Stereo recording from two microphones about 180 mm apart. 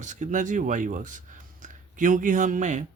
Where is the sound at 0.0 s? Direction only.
45° right (ahead or behind).